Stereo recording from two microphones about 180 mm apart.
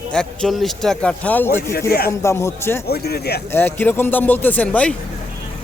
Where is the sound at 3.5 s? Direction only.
10° left (ahead or behind).